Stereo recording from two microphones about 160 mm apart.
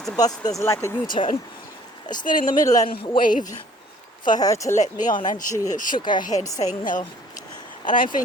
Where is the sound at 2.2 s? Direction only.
55° left (ahead or behind).